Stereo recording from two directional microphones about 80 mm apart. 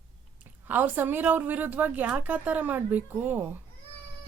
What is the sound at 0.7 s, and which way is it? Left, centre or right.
Speech, right.